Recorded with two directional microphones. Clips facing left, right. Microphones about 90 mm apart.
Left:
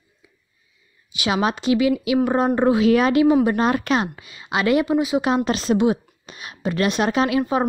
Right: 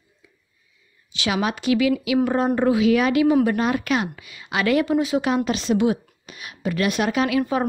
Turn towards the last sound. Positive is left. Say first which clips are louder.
# left 1 dB
turn(degrees=25)  # may be behind; listen again after turning